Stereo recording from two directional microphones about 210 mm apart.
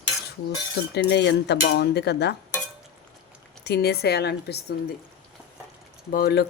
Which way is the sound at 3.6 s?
50° left (ahead or behind).